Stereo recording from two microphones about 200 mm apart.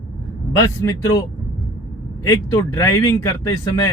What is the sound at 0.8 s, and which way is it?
Speech, 15° left (ahead or behind).